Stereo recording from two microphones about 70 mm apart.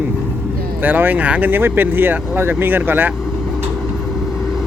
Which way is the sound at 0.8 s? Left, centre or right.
Right.